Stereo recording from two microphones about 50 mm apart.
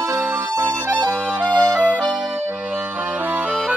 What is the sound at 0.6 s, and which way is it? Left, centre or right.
Music, right.